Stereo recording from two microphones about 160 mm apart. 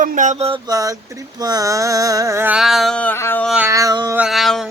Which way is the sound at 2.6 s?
Centre (ahead or behind).